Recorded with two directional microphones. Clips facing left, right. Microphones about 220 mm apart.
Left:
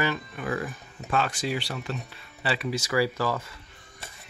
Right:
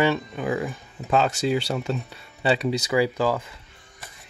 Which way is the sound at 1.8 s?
25° right (ahead or behind).